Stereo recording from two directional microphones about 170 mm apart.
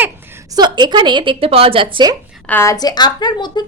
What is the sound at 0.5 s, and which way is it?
Speech, 25° right (ahead or behind).